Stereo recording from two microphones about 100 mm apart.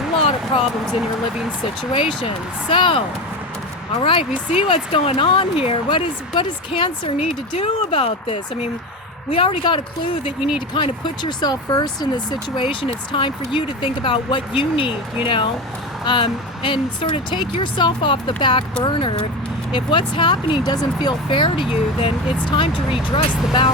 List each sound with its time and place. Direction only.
0.2 s a sound: 85° left
1.9 s speech: 65° left (ahead or behind)
4.0 s speech: 60° left (ahead or behind)
6.3 s speech: 55° left (ahead or behind); by 8.7 s 85° left
9.3 s speech: 60° left (ahead or behind)
12.8 s speech: 55° left (ahead or behind)